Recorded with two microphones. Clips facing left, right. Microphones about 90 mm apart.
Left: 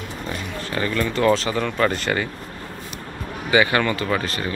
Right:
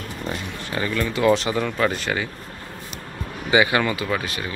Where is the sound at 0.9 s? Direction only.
5° right (ahead or behind).